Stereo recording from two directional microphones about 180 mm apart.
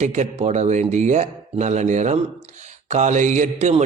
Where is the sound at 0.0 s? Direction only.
40° right (ahead or behind).